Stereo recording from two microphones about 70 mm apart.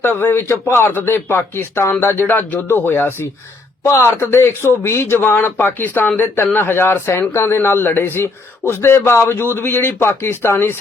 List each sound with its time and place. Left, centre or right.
0.0 s speech: left